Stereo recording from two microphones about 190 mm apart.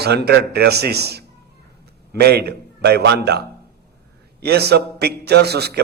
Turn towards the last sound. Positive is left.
turn(degrees=-60)  # may be behind; listen again after turning